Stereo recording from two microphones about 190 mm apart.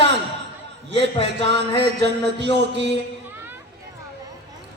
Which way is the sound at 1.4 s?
65° right (ahead or behind).